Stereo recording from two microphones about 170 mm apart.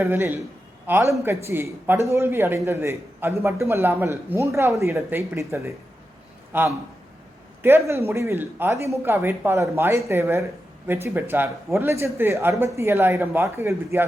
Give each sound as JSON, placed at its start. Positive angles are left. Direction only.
{"t": 0.0, "sound": "a man's voice", "side_deg": -15}